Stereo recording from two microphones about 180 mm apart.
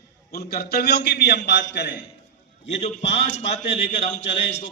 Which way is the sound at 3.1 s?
35° left (ahead or behind).